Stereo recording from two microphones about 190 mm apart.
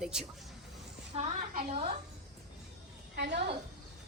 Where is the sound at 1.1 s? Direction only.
45° right (ahead or behind).